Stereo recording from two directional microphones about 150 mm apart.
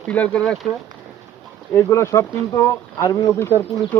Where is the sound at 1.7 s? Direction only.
20° left (ahead or behind).